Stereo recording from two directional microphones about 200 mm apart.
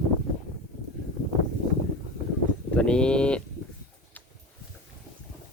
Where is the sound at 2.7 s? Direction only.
5° left (ahead or behind).